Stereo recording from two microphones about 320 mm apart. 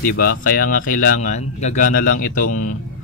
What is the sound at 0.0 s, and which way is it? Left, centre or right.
Speech, left.